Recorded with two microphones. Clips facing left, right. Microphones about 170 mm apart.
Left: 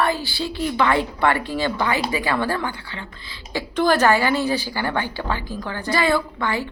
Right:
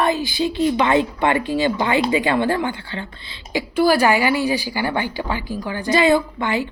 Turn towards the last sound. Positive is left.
turn(degrees=-20)  # may be behind; listen again after turning